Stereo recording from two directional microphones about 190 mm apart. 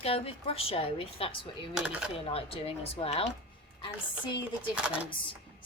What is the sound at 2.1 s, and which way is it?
A woman's voice, 30° left (ahead or behind).